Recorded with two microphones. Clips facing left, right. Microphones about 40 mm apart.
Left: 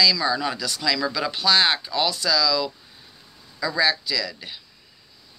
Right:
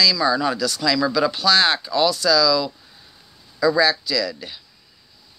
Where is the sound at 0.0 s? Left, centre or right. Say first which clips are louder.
Right 3 dB; centre.